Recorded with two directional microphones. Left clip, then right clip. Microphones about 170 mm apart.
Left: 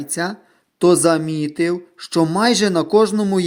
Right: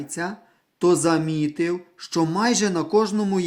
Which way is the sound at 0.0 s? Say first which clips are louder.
Left 6 dB; 30° left (ahead or behind).